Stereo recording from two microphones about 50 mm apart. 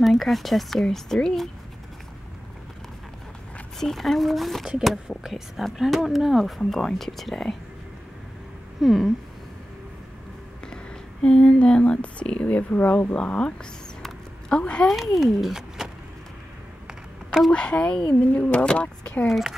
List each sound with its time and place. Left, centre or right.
0.0 s speech: centre
3.8 s speech: centre
6.6 s speech: centre
8.8 s speech: centre
11.2 s speech: left
14.9 s speech: centre
17.5 s speech: left